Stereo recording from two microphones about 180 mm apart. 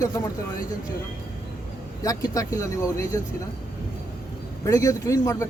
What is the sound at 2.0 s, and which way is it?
Speech, 20° left (ahead or behind).